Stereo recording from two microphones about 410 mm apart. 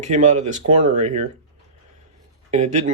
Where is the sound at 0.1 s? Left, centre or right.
Centre.